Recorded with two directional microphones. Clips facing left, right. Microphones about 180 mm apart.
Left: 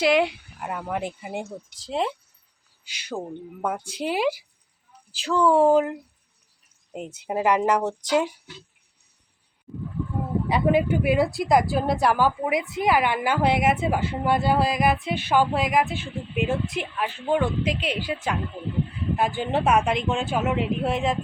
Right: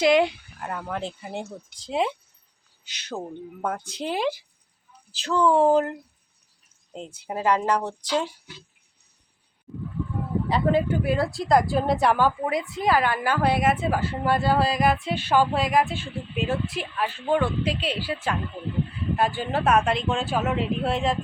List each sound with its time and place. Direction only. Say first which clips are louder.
0.0 s speech: right 1 dB; 5° left (ahead or behind)
1.8 s speech: right 1 dB; centre (ahead or behind)
2.8 s speech: left 1 dB; 10° left (ahead or behind)
10.5 s speech: left 1 dB; 15° left (ahead or behind)